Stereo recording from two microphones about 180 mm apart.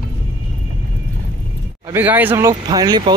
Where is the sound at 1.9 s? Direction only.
10° right (ahead or behind).